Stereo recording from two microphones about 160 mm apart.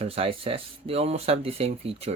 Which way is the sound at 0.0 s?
35° right (ahead or behind).